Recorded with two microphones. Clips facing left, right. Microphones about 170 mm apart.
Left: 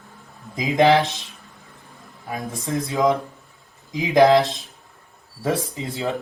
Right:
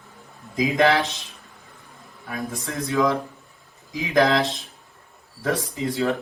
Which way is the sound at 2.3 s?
20° left (ahead or behind).